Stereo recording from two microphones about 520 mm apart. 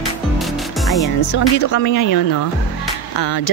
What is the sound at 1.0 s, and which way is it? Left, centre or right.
Speech, left.